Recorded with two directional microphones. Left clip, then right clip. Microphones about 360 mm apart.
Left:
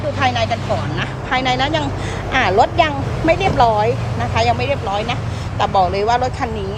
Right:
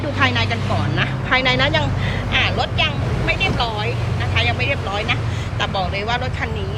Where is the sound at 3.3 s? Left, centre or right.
Left.